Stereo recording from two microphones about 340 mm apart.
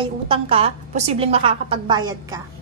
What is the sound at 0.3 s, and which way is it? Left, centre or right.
A woman's voice, centre.